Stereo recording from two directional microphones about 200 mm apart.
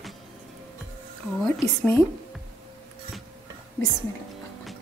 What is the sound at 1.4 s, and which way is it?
Speech, 5° left (ahead or behind).